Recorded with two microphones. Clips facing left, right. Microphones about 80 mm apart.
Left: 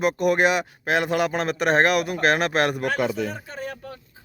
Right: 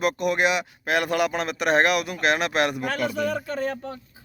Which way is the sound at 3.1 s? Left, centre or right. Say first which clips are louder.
Right 3 dB; right.